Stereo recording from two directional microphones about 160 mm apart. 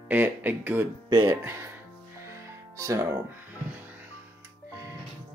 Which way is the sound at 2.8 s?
20° right (ahead or behind).